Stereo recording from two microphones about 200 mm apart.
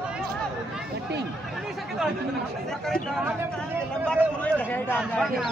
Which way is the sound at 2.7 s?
Centre (ahead or behind).